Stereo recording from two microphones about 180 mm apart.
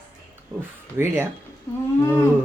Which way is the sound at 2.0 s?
15° left (ahead or behind).